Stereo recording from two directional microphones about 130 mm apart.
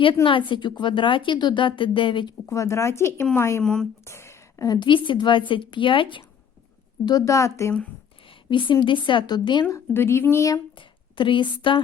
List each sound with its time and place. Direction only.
0.0 s a woman's voice: 40° left (ahead or behind)
2.5 s speech: 25° left (ahead or behind)
3.6 s speech: 5° left (ahead or behind)
4.0 s a woman's voice: 20° left (ahead or behind); by 6.2 s 40° left (ahead or behind)
7.0 s speech: 30° left (ahead or behind)
8.4 s a woman's voice: 40° left (ahead or behind)
9.6 s speech: 20° left (ahead or behind)
10.8 s a woman's voice: 40° left (ahead or behind)